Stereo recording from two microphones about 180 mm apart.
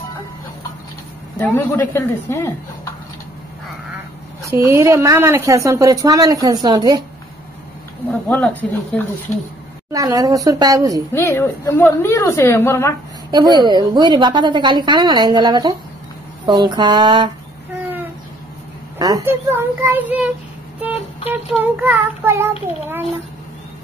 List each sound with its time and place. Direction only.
1.4 s a woman's voice: 10° left (ahead or behind)
4.5 s a woman's voice: 15° right (ahead or behind)
8.1 s a woman's voice: 10° left (ahead or behind)
9.9 s a woman's voice: 20° right (ahead or behind)
11.1 s a woman's voice: 15° left (ahead or behind)
13.3 s a woman's voice: 25° right (ahead or behind)
18.9 s a woman's voice: 20° right (ahead or behind)
21.5 s a woman's voice: 10° right (ahead or behind)